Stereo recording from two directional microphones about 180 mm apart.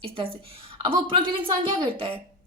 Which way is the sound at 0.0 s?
30° right (ahead or behind).